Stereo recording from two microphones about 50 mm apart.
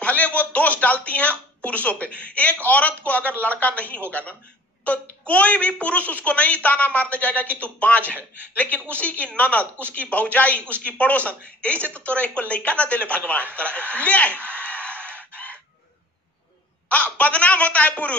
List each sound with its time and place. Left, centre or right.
0.0 s a woman's voice: left
14.5 s a sound: left
16.9 s a woman's voice: left